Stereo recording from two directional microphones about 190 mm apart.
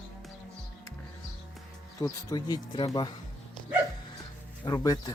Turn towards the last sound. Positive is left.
turn(degrees=20)  # may be behind; listen again after turning